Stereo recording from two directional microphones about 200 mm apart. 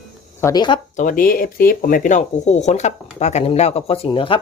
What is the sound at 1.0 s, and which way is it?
Speech, 40° left (ahead or behind).